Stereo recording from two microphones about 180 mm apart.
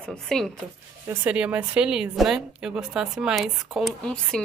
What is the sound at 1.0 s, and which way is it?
A woman's voice, 5° right (ahead or behind).